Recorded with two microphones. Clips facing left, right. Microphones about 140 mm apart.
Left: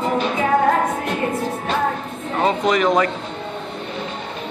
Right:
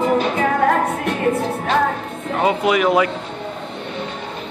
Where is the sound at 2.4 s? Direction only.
5° right (ahead or behind).